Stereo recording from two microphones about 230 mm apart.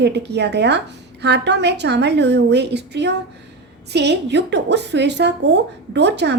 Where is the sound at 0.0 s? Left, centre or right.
Right.